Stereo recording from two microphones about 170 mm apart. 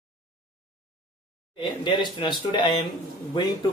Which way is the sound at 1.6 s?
30° left (ahead or behind).